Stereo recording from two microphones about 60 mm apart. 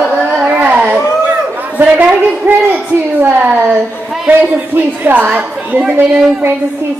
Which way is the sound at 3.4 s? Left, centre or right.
Right.